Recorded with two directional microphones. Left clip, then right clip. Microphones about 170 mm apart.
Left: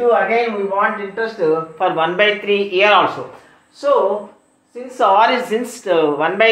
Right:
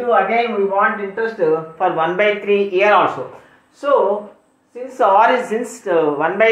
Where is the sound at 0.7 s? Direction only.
Centre (ahead or behind).